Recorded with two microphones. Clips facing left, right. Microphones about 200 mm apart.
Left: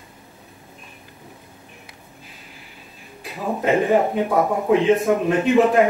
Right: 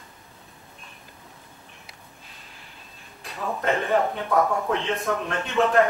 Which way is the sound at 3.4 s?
15° left (ahead or behind).